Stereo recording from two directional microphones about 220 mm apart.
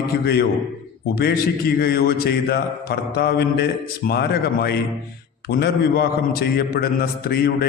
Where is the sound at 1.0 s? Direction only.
45° left (ahead or behind).